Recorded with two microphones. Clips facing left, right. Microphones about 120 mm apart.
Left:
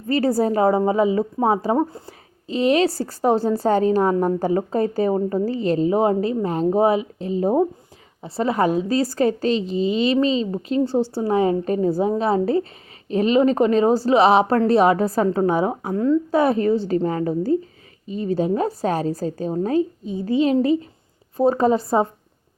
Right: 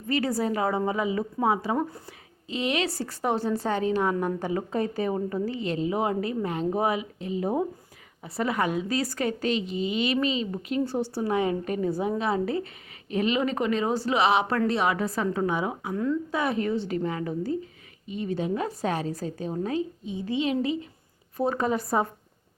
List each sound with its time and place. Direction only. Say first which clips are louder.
0.1 s a woman's voice: left 7 dB; 35° left (ahead or behind)